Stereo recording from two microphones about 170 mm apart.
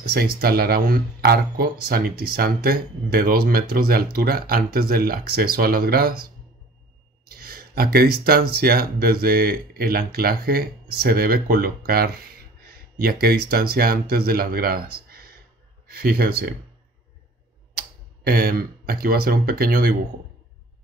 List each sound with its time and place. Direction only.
0.1 s speech: 65° right (ahead or behind)
7.2 s speech: 60° right (ahead or behind)
17.7 s speech: 65° right (ahead or behind)